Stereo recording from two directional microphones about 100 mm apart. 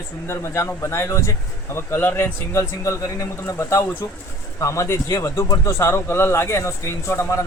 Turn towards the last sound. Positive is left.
turn(degrees=30)  # may be behind; listen again after turning